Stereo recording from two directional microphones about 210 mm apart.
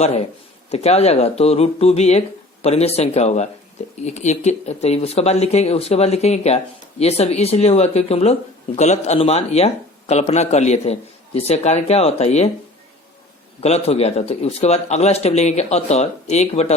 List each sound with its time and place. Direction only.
0.7 s speech: 30° left (ahead or behind)
13.6 s speech: 30° left (ahead or behind)